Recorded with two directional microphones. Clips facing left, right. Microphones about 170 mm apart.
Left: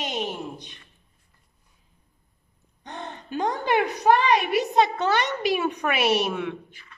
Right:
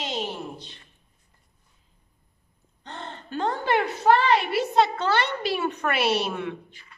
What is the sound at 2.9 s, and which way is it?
A woman's voice, 15° left (ahead or behind).